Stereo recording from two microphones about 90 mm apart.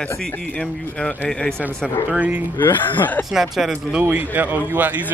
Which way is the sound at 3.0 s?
20° left (ahead or behind).